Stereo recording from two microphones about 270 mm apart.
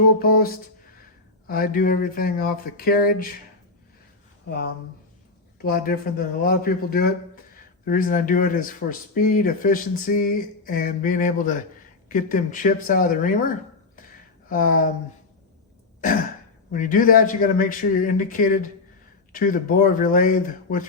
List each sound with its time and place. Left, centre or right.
0.2 s a sound: left
1.5 s speech: left
4.4 s speech: left
14.5 s speech: left
16.0 s a sound: left
16.7 s speech: left